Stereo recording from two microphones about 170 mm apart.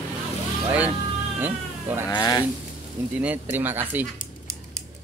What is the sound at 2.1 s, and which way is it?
Speech, 25° left (ahead or behind).